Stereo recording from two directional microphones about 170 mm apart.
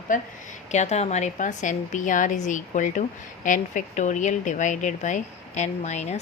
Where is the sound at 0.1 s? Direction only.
50° left (ahead or behind).